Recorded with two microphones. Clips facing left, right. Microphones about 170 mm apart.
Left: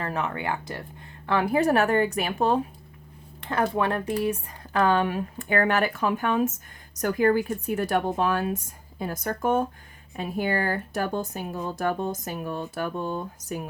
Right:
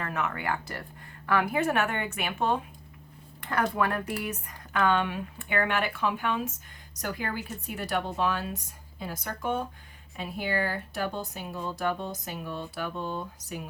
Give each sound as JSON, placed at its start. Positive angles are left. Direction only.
{"t": 0.0, "sound": "speech", "side_deg": 30}
{"t": 3.4, "sound": "speech", "side_deg": 25}